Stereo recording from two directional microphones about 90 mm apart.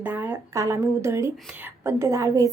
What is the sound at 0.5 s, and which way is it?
Speech, 35° right (ahead or behind).